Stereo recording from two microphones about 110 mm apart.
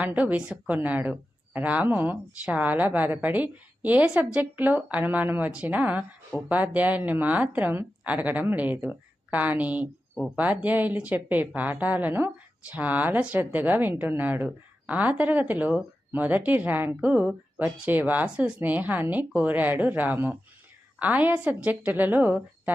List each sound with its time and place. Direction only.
0.0 s speech: 15° right (ahead or behind)